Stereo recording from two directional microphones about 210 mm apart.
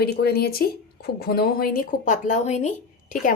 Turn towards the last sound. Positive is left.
turn(degrees=35)  # may be behind; listen again after turning